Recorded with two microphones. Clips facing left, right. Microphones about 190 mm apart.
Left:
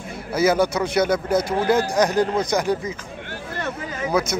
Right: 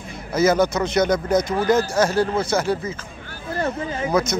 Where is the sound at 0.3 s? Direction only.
10° left (ahead or behind).